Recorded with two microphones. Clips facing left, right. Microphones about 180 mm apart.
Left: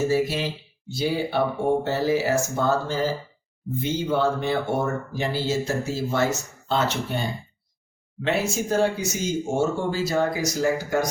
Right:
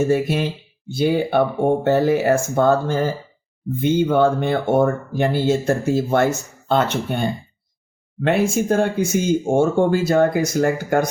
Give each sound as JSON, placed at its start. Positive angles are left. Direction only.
{"t": 0.1, "sound": "speech", "side_deg": -55}